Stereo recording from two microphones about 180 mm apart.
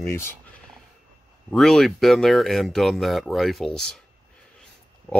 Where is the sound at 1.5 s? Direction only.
Centre (ahead or behind).